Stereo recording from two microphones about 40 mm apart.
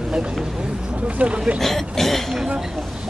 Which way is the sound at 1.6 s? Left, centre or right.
Centre.